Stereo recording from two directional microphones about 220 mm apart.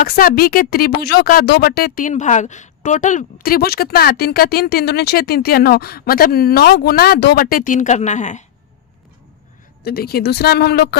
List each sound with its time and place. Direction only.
0.2 s speech: 40° left (ahead or behind)
9.8 s speech: 45° left (ahead or behind)